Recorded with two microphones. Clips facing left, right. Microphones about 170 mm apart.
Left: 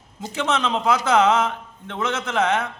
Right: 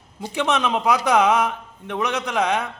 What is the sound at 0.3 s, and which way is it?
A man's voice, 15° right (ahead or behind).